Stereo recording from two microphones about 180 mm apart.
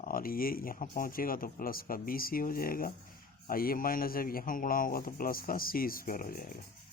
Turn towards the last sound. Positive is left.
turn(degrees=50)  # may be behind; listen again after turning